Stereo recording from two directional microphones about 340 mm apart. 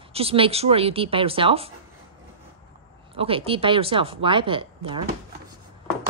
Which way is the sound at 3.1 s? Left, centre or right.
Centre.